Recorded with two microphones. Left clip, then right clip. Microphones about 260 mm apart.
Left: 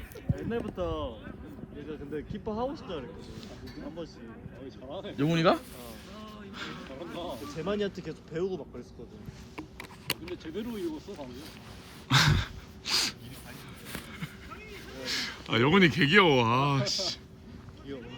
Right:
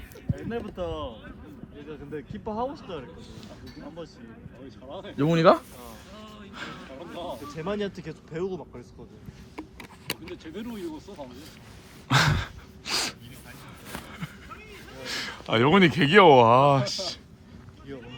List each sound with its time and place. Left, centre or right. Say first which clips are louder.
0.3 s speech: even; right
2.5 s speech: right 3 dB; right
5.1 s speech: right 6 dB; centre
6.5 s speech: right 2 dB; centre
7.1 s speech: right 3 dB; right
10.3 s speech: left 1 dB; right
12.0 s gasp: right 2 dB; centre
13.8 s a sound: right 3 dB; centre
15.0 s speech: right 1 dB; centre